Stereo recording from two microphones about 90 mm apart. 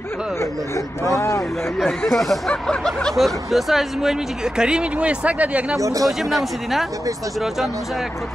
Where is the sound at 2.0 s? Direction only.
Centre (ahead or behind); by 5.8 s 15° right (ahead or behind).